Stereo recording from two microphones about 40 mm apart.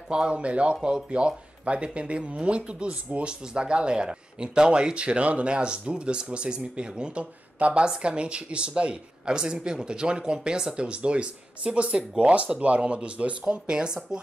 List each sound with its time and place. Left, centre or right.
0.1 s speech: right
7.5 s speech: right